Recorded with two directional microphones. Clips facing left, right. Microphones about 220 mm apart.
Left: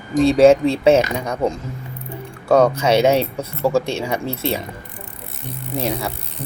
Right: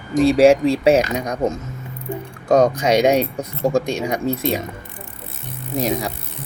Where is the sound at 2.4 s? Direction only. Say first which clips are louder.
Even; 40° right (ahead or behind).